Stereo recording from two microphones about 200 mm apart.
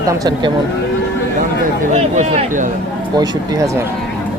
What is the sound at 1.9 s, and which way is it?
Speech, 35° right (ahead or behind).